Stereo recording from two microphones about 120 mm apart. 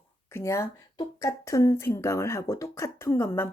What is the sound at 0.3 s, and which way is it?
Speech, 20° left (ahead or behind).